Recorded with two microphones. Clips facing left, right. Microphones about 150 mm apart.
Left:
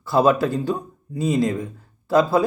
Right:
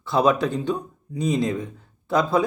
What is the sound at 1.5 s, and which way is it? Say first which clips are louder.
Speech: left 1 dB; 5° left (ahead or behind).